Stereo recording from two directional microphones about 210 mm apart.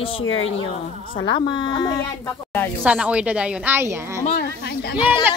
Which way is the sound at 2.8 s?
5° right (ahead or behind).